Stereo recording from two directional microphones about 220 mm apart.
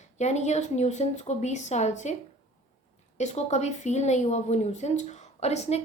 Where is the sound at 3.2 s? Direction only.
30° left (ahead or behind).